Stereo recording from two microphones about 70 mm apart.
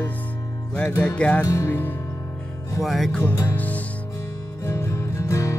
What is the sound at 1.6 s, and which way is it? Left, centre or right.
Speech, left.